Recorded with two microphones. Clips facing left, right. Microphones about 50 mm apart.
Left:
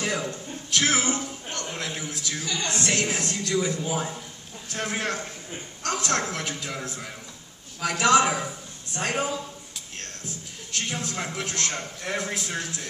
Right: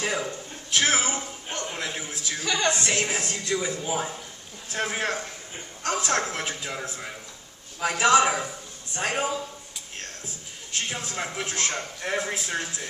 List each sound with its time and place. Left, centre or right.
0.0 s a sound: centre
2.7 s a man's voice: centre
10.7 s a man's voice: right